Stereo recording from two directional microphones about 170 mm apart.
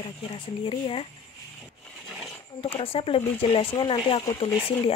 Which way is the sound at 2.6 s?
35° left (ahead or behind).